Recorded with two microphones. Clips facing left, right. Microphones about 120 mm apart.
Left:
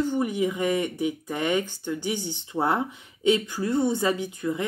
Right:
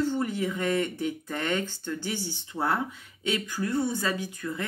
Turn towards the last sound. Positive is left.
turn(degrees=20)  # may be behind; listen again after turning